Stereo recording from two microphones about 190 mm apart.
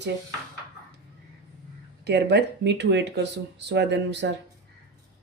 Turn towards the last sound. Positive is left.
turn(degrees=-65)  # may be behind; listen again after turning